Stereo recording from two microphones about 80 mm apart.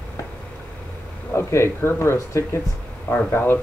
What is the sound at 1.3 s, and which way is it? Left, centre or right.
Speech, left.